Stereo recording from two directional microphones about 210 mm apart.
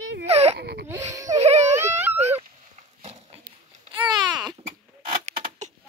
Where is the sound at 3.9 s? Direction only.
20° right (ahead or behind).